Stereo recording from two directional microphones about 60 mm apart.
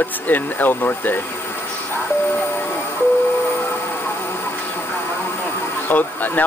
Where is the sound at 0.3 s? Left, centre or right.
Left.